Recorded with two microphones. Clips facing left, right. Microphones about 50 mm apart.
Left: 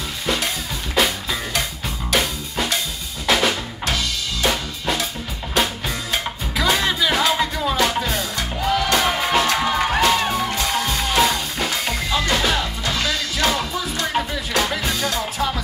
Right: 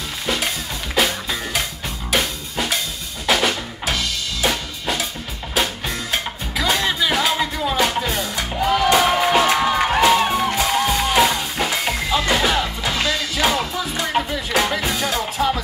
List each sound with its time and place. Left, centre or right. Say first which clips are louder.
0.9 s music: even; centre
3.3 s drum kit: even; centre
5.5 s music: left 1 dB; centre